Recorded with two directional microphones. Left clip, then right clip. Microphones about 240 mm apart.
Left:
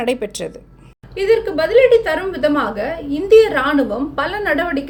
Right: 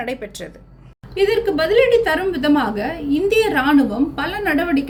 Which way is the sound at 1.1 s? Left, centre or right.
Centre.